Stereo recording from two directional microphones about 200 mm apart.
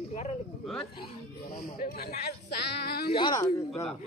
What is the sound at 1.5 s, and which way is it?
Speech, 45° left (ahead or behind).